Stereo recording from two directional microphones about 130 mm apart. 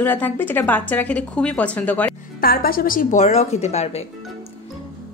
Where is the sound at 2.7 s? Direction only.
90° left; by 4.0 s 55° left (ahead or behind).